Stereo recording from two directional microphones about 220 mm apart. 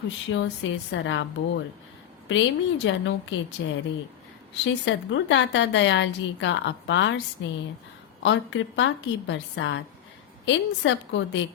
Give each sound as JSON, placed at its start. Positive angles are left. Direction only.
{"t": 0.3, "sound": "a woman's voice", "side_deg": 55}